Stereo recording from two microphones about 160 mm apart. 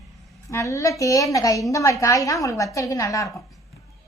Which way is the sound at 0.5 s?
20° left (ahead or behind).